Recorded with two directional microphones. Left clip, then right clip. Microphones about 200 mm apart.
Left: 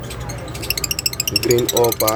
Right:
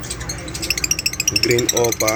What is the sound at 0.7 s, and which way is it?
Music, 60° left (ahead or behind).